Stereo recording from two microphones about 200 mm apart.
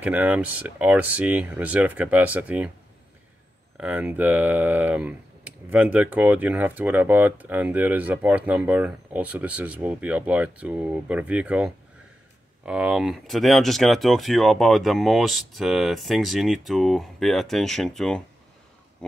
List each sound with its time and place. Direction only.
0.0 s speech: 5° right (ahead or behind)
3.7 s speech: 5° right (ahead or behind)